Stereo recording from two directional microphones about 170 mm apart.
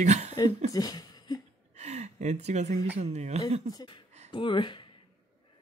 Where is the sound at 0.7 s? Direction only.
20° left (ahead or behind).